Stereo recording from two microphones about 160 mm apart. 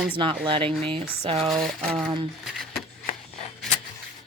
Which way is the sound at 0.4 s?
30° right (ahead or behind).